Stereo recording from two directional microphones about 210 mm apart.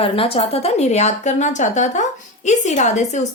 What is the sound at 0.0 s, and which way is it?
Speech, 25° left (ahead or behind).